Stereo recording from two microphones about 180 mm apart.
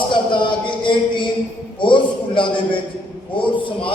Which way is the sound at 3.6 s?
30° left (ahead or behind).